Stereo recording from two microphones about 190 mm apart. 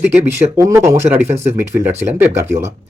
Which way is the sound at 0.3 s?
15° right (ahead or behind).